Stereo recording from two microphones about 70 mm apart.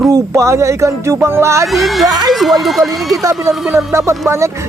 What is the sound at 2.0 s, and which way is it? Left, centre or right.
Speech, right.